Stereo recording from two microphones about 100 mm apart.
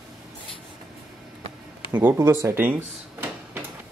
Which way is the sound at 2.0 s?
25° right (ahead or behind).